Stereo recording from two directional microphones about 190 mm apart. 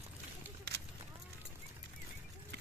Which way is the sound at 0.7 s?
60° right (ahead or behind).